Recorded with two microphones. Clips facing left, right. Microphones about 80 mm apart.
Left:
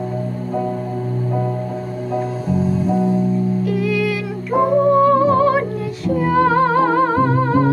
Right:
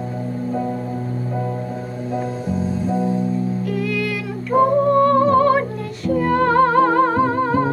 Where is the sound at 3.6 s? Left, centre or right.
Centre.